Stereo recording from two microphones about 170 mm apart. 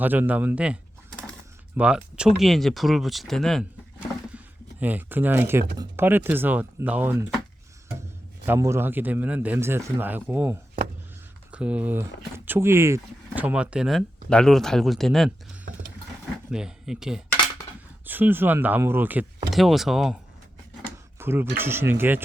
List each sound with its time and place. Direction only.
0.0 s a man's voice: 10° right (ahead or behind)
4.8 s a man's voice: 10° right (ahead or behind)
6.1 s a man's voice: 10° right (ahead or behind)
8.4 s a man's voice: 15° right (ahead or behind); by 15.3 s centre (ahead or behind)
16.5 s a man's voice: 5° right (ahead or behind)
19.5 s speech: centre (ahead or behind)
21.2 s a man's voice: 15° right (ahead or behind)